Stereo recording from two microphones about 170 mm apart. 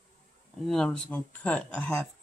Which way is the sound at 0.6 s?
5° left (ahead or behind).